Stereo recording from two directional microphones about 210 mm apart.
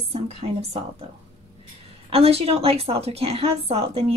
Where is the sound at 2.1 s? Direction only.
30° right (ahead or behind).